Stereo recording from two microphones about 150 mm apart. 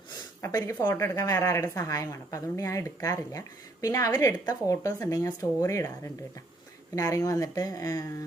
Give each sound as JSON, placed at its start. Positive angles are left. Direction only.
{"t": 0.4, "sound": "a woman's voice", "side_deg": 20}